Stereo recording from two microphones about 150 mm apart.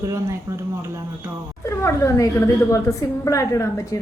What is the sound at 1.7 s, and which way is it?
Speech, 20° left (ahead or behind).